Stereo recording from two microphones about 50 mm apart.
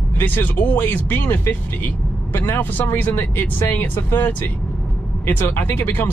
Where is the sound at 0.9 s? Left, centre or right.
Left.